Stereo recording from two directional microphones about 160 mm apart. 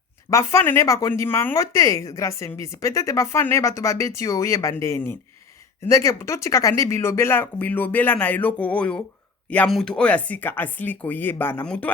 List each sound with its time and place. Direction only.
0.3 s speech: 20° left (ahead or behind)